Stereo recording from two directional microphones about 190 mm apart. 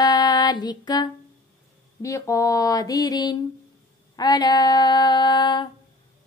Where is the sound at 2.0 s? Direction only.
15° left (ahead or behind).